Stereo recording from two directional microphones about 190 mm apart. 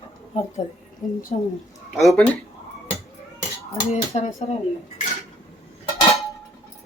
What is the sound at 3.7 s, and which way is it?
Speech, 35° left (ahead or behind).